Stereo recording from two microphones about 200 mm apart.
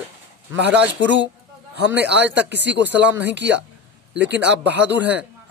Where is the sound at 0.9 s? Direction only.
65° right (ahead or behind).